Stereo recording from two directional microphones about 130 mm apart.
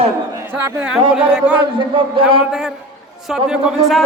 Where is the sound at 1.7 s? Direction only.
40° right (ahead or behind).